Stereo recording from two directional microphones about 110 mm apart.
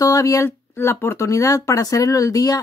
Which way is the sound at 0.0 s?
30° left (ahead or behind).